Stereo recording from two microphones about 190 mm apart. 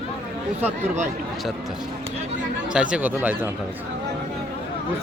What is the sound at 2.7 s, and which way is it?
Speech, 5° right (ahead or behind).